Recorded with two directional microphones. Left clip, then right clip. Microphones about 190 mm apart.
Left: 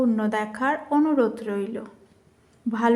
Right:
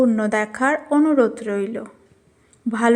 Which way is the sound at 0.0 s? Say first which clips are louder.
Right 5 dB; 25° right (ahead or behind).